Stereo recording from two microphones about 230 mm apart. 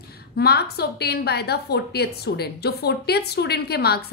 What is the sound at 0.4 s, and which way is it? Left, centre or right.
A woman's voice, left.